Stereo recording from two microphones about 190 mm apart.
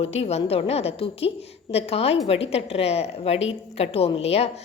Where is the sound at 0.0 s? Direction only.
30° left (ahead or behind).